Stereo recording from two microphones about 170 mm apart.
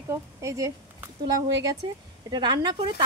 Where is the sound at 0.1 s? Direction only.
15° right (ahead or behind).